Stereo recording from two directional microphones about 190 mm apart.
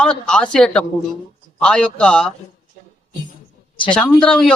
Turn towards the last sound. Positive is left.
turn(degrees=5)  # may be behind; listen again after turning